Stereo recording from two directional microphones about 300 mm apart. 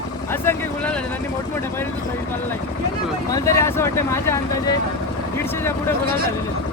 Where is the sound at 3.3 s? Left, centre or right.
Centre.